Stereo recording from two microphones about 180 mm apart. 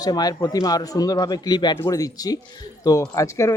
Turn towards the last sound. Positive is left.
turn(degrees=15)  # may be behind; listen again after turning